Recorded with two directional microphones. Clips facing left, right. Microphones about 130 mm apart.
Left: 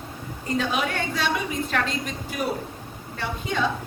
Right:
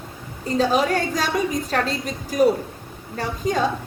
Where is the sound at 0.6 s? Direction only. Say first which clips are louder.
Right 7 dB; 35° right (ahead or behind).